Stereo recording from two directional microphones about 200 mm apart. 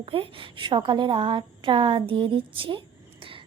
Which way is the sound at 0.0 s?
25° right (ahead or behind).